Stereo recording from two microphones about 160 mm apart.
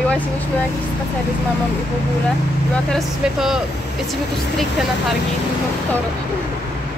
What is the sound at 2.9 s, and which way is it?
Speech, 5° right (ahead or behind).